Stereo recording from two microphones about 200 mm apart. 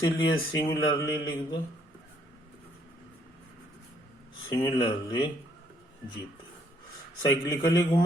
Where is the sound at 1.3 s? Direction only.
25° left (ahead or behind).